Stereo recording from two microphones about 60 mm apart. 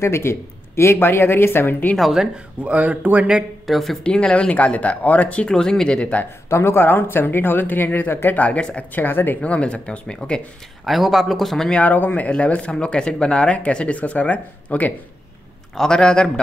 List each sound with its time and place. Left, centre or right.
0.0 s speech: left
2.0 s a man's voice: centre
2.3 s speech: right
3.6 s a man's voice: centre
4.0 s speech: centre
5.5 s speech: centre
6.5 s speech: left
8.4 s speech: centre
8.9 s speech: left
9.4 s speech: centre
10.9 s a man's voice: centre
11.7 s speech: left
15.7 s speech: centre